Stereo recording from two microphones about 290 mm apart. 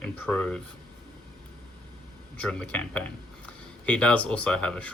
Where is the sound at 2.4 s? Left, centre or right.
Centre.